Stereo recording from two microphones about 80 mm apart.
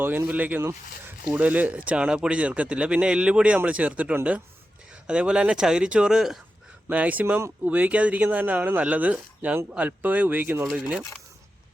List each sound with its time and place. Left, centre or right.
0.0 s speech: right
1.2 s speech: centre
6.8 s speech: centre